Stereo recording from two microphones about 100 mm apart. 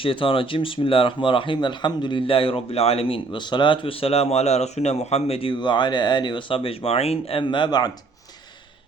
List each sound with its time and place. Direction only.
0.0 s speech: 65° left (ahead or behind); by 3.2 s 85° left
3.3 s speech: 50° left (ahead or behind); by 7.4 s 80° left
7.4 s speech: 50° left (ahead or behind)